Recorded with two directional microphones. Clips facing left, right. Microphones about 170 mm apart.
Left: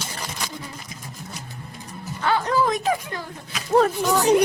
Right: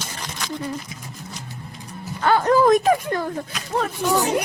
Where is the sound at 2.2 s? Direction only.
50° right (ahead or behind).